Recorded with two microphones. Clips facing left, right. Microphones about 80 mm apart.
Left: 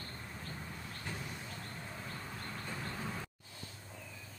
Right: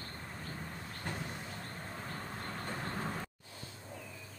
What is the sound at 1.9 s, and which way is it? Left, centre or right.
Vehicle, right.